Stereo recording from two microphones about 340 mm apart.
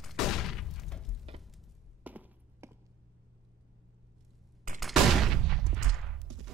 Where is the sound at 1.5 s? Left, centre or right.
Centre.